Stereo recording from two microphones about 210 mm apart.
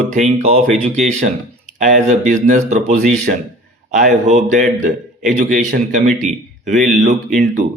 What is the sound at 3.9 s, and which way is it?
Speech, 35° right (ahead or behind).